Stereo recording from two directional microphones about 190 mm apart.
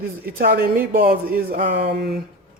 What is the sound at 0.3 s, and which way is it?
Speech, 50° right (ahead or behind).